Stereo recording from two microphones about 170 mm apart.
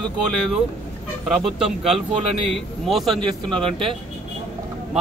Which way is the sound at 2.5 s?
Centre (ahead or behind).